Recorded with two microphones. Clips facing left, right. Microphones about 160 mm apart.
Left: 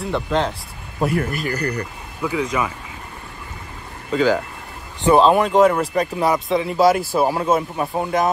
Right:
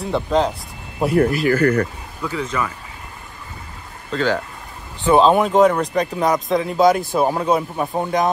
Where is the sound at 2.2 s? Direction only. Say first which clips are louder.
Left 3 dB; 20° left (ahead or behind).